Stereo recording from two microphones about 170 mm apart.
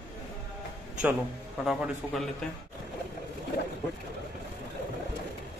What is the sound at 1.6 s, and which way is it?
Speech, centre (ahead or behind).